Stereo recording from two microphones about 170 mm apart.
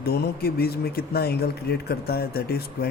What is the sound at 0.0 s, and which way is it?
Speech, 65° left (ahead or behind).